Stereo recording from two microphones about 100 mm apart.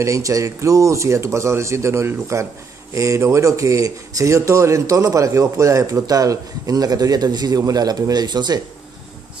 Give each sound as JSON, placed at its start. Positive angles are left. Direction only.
{"t": 0.0, "sound": "speech", "side_deg": -35}